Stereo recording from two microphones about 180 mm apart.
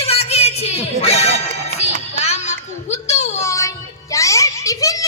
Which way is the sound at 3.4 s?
15° left (ahead or behind).